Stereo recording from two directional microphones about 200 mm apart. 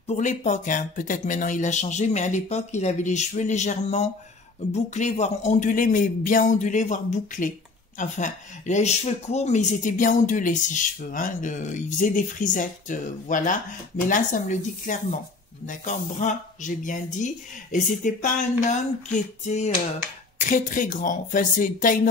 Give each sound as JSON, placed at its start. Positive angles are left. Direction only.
{"t": 0.1, "sound": "speech", "side_deg": 35}